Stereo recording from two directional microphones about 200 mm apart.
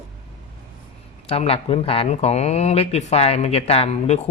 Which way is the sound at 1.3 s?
30° left (ahead or behind).